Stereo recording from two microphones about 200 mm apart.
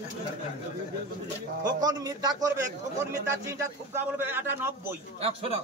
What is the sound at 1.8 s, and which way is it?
A man's voice, 20° right (ahead or behind).